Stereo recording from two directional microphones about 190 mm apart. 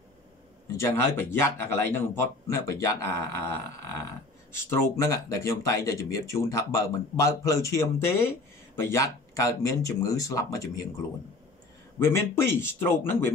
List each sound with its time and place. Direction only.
0.7 s speech: 15° left (ahead or behind)
4.6 s speech: 15° left (ahead or behind)
12.0 s speech: 15° left (ahead or behind)